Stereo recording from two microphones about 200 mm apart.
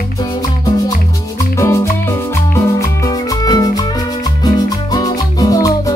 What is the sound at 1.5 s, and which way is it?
Music, 15° left (ahead or behind).